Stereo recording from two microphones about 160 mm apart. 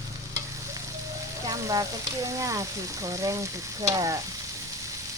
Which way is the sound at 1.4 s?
20° right (ahead or behind).